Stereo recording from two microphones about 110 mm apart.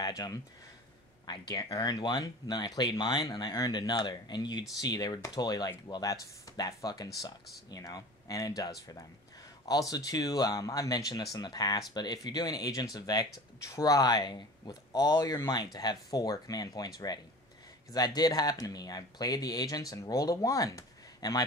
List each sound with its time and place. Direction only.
0.0 s speech: 35° left (ahead or behind)